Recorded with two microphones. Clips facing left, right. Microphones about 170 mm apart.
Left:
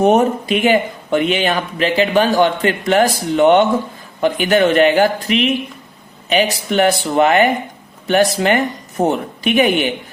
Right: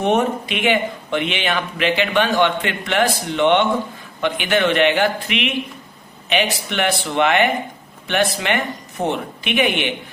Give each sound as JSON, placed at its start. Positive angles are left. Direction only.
{"t": 0.0, "sound": "speech", "side_deg": 40}